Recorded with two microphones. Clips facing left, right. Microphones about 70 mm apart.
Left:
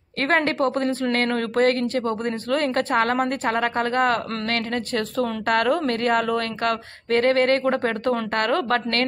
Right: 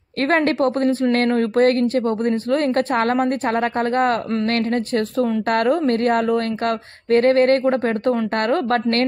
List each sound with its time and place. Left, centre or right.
0.3 s a woman's voice: left
1.3 s speech: right
1.7 s a woman's voice: left
3.9 s speech: right
5.5 s speech: right
7.1 s speech: left
8.4 s speech: right